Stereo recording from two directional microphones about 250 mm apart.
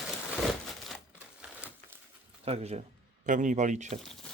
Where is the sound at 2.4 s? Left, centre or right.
Right.